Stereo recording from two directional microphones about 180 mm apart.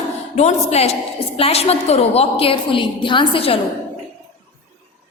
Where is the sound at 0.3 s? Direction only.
35° left (ahead or behind).